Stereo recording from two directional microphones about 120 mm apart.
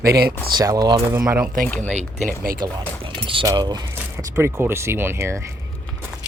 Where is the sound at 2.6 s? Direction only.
30° right (ahead or behind).